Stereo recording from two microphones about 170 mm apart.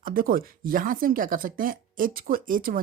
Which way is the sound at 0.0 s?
55° right (ahead or behind).